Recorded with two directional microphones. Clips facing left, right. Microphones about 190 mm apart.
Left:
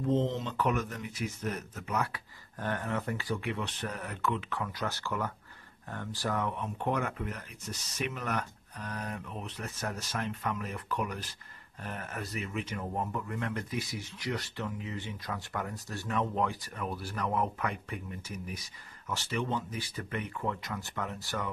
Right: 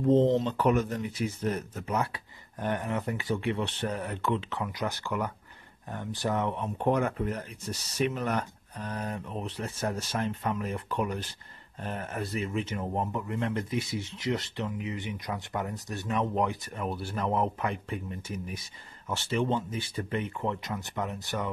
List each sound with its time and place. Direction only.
0.1 s speech: 35° right (ahead or behind); by 21.5 s 20° right (ahead or behind)